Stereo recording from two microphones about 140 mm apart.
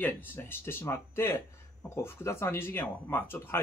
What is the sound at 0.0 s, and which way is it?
A man's voice, 15° left (ahead or behind).